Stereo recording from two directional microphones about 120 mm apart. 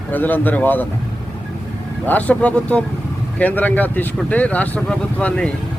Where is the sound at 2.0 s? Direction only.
15° left (ahead or behind).